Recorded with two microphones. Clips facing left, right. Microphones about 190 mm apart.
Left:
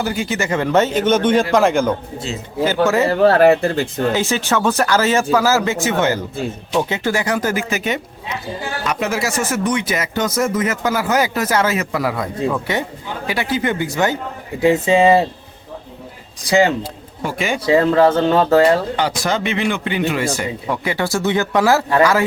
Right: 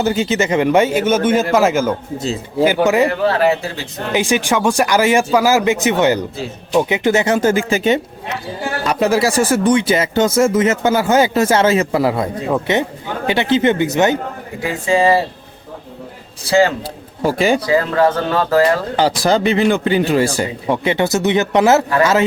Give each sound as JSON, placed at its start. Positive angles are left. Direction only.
{"t": 0.0, "sound": "a man's voice", "side_deg": -25}
{"t": 2.1, "sound": "a man's voice", "side_deg": -35}
{"t": 2.6, "sound": "speech", "side_deg": -15}
{"t": 3.2, "sound": "speech", "side_deg": 50}
{"t": 4.1, "sound": "speech", "side_deg": -15}
{"t": 14.6, "sound": "speech", "side_deg": 25}
{"t": 16.4, "sound": "speech", "side_deg": 15}
{"t": 16.8, "sound": "speech", "side_deg": -35}
{"t": 17.6, "sound": "speech", "side_deg": 25}
{"t": 18.9, "sound": "a man's voice", "side_deg": -35}